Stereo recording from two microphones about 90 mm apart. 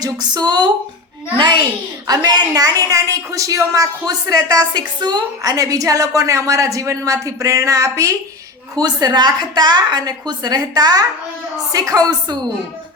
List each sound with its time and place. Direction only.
0.0 s a woman's voice: 50° right (ahead or behind)
2.0 s a woman's voice: 50° right (ahead or behind)
8.7 s a woman's voice: 45° right (ahead or behind)